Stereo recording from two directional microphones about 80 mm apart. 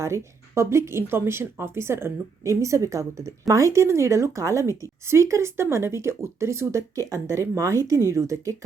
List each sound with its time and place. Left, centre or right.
0.0 s speech: right